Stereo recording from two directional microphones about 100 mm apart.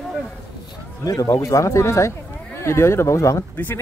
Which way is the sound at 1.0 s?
35° left (ahead or behind).